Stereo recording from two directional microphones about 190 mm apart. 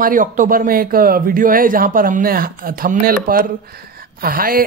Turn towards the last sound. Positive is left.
turn(degrees=-50)  # may be behind; listen again after turning